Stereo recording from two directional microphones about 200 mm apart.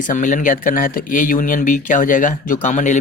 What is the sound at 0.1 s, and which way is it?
Speech, 40° left (ahead or behind).